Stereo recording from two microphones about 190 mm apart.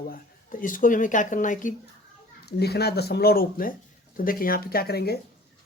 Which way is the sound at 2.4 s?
55° left (ahead or behind).